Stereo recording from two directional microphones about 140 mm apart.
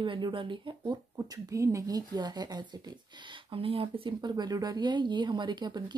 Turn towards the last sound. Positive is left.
turn(degrees=-30)  # may be behind; listen again after turning